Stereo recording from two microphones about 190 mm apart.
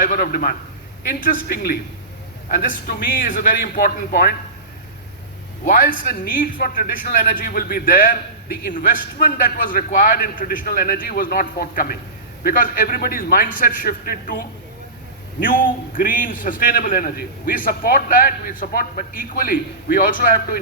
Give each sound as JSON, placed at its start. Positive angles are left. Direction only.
{"t": 0.0, "sound": "a man's voice", "side_deg": 50}
{"t": 5.6, "sound": "a man's voice", "side_deg": 45}